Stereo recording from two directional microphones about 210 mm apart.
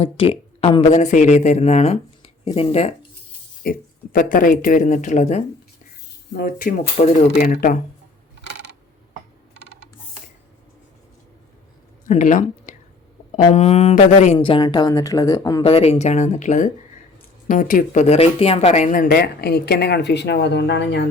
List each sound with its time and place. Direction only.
0.0 s speech: 30° left (ahead or behind)
3.6 s speech: 45° left (ahead or behind)
12.0 s speech: 35° left (ahead or behind)
14.3 s speech: 25° left (ahead or behind)
15.6 s speech: 30° left (ahead or behind); by 21.1 s 55° left (ahead or behind)